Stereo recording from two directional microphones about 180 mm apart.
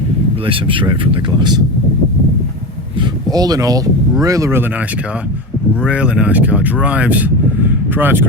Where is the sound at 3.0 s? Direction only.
25° right (ahead or behind).